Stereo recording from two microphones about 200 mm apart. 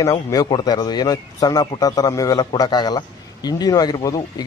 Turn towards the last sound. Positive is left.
turn(degrees=20)  # may be behind; listen again after turning